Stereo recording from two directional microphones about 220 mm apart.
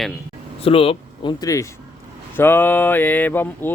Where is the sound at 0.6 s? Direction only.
25° left (ahead or behind).